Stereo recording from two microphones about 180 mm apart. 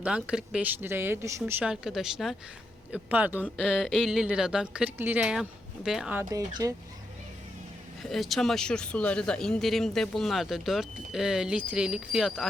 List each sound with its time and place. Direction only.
0.0 s speech: 5° right (ahead or behind)
6.6 s speech: 20° right (ahead or behind)
8.1 s speech: centre (ahead or behind)